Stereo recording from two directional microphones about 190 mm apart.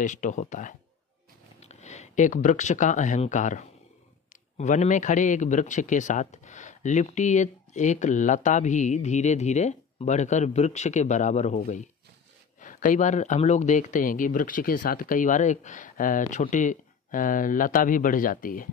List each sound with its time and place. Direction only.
0.0 s a man's voice: 40° left (ahead or behind)